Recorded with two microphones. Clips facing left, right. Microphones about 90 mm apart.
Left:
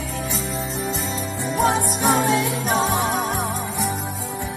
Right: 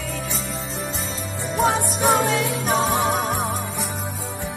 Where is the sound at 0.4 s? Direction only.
35° right (ahead or behind).